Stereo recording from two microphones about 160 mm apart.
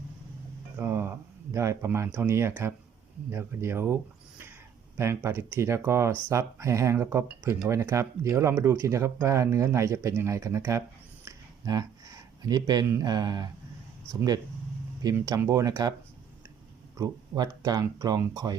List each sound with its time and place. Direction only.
0.8 s speech: 15° right (ahead or behind)
4.9 s speech: 15° right (ahead or behind)
17.0 s speech: 25° right (ahead or behind)